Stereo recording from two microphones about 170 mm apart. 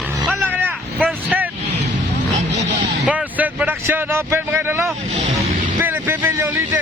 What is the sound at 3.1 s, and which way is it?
Vehicle, 10° right (ahead or behind).